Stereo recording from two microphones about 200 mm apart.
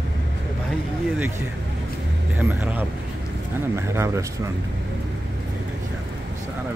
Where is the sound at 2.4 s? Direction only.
10° right (ahead or behind).